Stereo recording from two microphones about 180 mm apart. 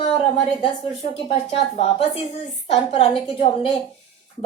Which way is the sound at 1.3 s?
35° left (ahead or behind).